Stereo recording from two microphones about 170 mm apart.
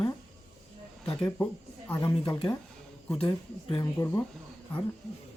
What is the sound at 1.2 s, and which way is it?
Speech, 10° left (ahead or behind).